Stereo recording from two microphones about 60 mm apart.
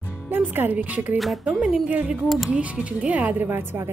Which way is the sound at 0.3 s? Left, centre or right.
Right.